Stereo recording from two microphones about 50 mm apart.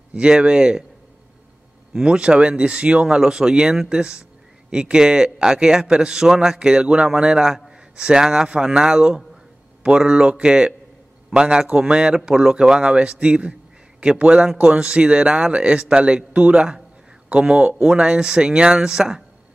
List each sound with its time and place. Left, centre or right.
0.1 s a man's voice: right
2.0 s a man's voice: centre